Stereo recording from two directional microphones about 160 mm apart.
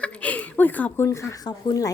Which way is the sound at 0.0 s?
10° left (ahead or behind).